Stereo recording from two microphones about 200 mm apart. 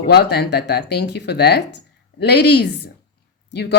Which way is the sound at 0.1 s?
55° left (ahead or behind).